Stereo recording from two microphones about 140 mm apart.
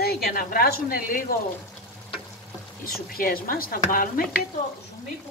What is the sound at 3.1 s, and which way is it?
Speech, 90° left.